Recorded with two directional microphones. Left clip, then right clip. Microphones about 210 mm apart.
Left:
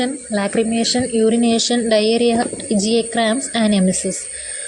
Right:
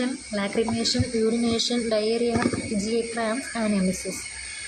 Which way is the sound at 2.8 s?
35° left (ahead or behind).